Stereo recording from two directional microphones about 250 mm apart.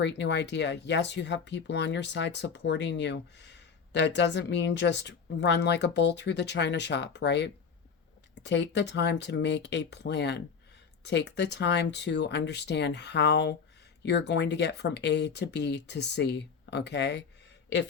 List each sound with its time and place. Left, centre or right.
0.0 s speech: left